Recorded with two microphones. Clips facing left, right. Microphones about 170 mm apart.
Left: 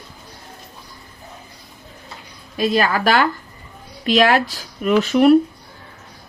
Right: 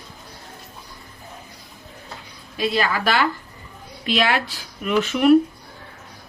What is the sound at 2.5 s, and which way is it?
Speech, 45° left (ahead or behind).